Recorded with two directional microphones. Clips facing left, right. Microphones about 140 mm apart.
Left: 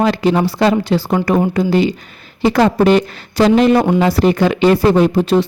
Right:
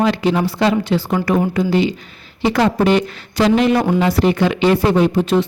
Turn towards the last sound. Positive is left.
turn(degrees=35)  # may be behind; listen again after turning